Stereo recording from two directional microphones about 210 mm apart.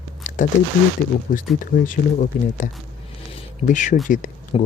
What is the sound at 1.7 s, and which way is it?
Speech, 40° left (ahead or behind).